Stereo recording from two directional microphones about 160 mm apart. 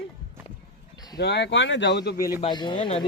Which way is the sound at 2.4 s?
30° left (ahead or behind).